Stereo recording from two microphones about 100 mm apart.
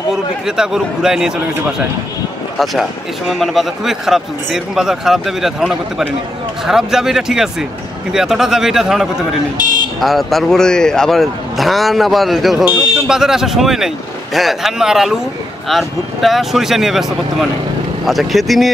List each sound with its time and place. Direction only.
0.1 s a man's voice: 5° right (ahead or behind)
2.6 s speech: centre (ahead or behind)
9.6 s buzzer: 45° left (ahead or behind)
9.9 s speech: centre (ahead or behind)